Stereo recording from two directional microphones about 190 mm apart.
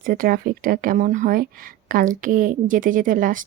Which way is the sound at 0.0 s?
50° right (ahead or behind).